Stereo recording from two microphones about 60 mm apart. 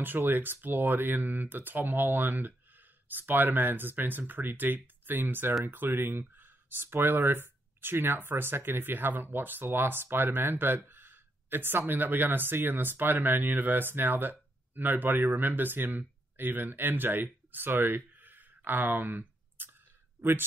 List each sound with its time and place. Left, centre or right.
0.3 s speech: right